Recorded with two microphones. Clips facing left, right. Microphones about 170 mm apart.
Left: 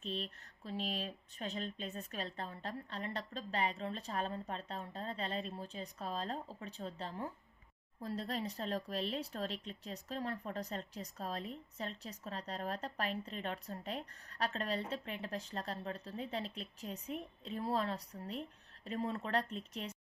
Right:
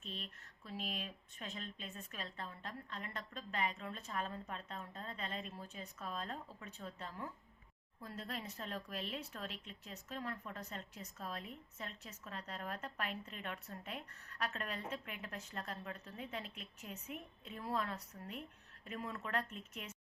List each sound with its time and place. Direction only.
0.0 s speech: 35° left (ahead or behind)